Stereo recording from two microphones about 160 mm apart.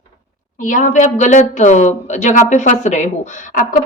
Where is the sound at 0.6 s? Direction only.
50° left (ahead or behind).